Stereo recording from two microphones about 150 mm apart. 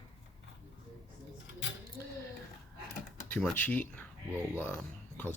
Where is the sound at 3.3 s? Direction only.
10° left (ahead or behind).